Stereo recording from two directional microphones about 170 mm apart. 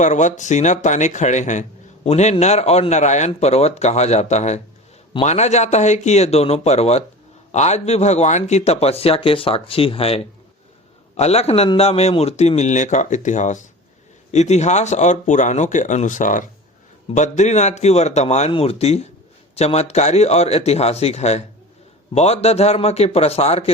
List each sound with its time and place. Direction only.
0.0 s speech: 45° left (ahead or behind)